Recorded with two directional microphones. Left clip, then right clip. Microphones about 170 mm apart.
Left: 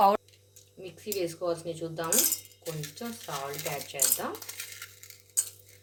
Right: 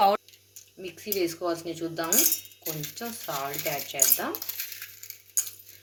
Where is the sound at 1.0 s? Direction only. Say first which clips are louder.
Right 3 dB; 35° right (ahead or behind).